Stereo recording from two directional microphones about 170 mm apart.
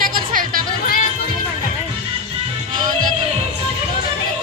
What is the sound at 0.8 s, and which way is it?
Music, 50° left (ahead or behind).